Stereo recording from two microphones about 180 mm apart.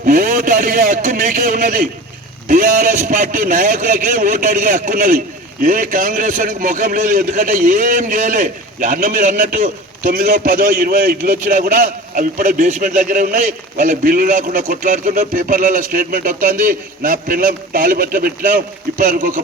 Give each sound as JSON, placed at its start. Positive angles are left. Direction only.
{"t": 0.0, "sound": "a man's voice", "side_deg": -50}